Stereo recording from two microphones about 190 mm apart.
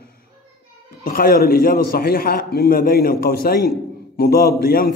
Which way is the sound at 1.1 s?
50° left (ahead or behind).